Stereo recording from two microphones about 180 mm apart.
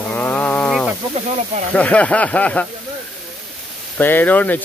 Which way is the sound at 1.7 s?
5° left (ahead or behind).